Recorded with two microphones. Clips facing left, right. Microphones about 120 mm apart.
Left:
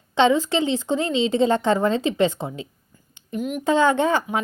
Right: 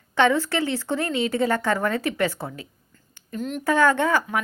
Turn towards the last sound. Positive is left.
turn(degrees=20)  # may be behind; listen again after turning